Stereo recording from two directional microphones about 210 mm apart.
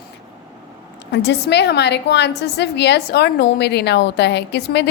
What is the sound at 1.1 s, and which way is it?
A woman's voice, 55° left (ahead or behind).